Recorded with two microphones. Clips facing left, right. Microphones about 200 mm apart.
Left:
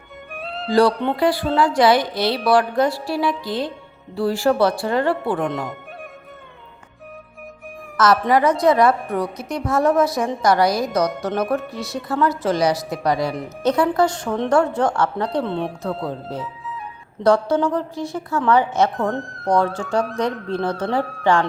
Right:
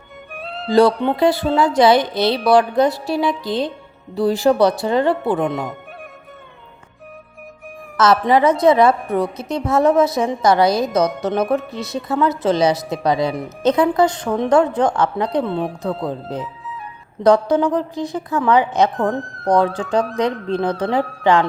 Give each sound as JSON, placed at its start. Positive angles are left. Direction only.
{"t": 0.3, "sound": "music", "side_deg": 0}
{"t": 0.7, "sound": "a woman's voice", "side_deg": -25}
{"t": 5.5, "sound": "speech", "side_deg": 0}
{"t": 7.9, "sound": "a woman's voice", "side_deg": -25}
{"t": 15.4, "sound": "speech", "side_deg": 0}
{"t": 16.4, "sound": "music", "side_deg": 0}
{"t": 17.2, "sound": "a woman's voice", "side_deg": -15}
{"t": 18.9, "sound": "speech", "side_deg": 0}
{"t": 19.7, "sound": "a woman's voice", "side_deg": -20}